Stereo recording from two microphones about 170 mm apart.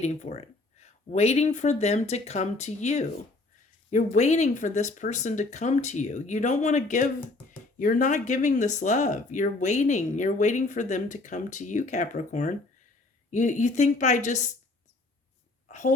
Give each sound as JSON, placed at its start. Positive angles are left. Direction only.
{"t": 0.0, "sound": "speech", "side_deg": 40}
{"t": 15.7, "sound": "speech", "side_deg": 45}